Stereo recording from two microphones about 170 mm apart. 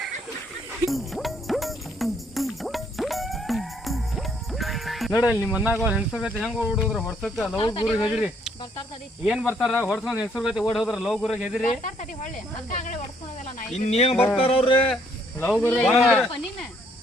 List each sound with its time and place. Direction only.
0.9 s music: centre (ahead or behind)
7.6 s speech: 30° left (ahead or behind)
8.1 s speech: centre (ahead or behind)
11.6 s speech: 50° left (ahead or behind)
13.7 s speech: 40° left (ahead or behind)
15.7 s speech: centre (ahead or behind)